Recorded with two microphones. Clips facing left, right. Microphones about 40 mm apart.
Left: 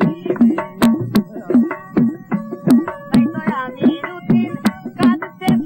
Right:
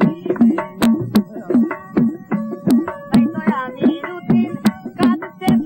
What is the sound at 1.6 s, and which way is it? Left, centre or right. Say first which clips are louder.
Music: left 1 dB; centre.